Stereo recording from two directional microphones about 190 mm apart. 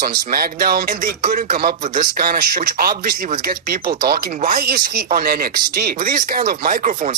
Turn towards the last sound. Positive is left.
turn(degrees=-45)  # may be behind; listen again after turning